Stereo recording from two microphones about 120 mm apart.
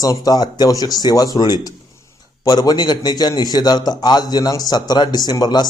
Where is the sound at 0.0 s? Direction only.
30° left (ahead or behind).